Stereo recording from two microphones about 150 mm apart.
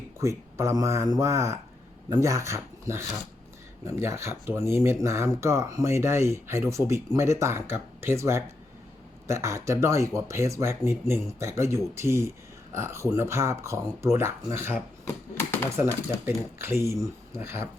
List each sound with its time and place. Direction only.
0.2 s speech: 20° right (ahead or behind)
15.0 s typewriter: 15° left (ahead or behind)
16.6 s speech: 15° right (ahead or behind)